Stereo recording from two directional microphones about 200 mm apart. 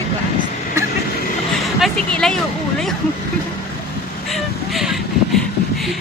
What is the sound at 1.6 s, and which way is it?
Speech, centre (ahead or behind).